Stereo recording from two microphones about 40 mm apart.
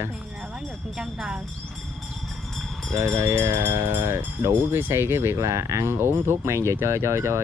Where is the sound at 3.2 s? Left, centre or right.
Right.